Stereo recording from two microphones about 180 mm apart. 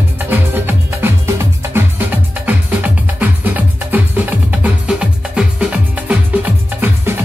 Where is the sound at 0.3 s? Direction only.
10° right (ahead or behind).